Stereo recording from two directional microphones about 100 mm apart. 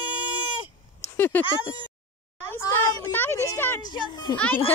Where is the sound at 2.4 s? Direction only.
20° left (ahead or behind).